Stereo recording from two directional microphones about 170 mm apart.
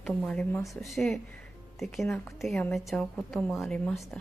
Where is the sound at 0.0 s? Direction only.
5° left (ahead or behind).